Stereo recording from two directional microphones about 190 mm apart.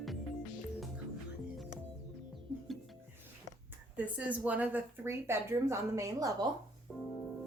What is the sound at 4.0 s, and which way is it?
A woman's voice, 10° right (ahead or behind).